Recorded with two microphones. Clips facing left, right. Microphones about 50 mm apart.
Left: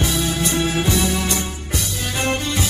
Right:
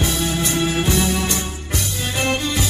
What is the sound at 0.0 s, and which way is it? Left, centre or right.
Music, right.